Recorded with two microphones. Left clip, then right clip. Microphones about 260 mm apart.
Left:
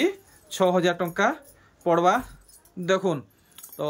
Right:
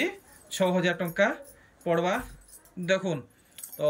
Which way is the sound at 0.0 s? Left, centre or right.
Centre.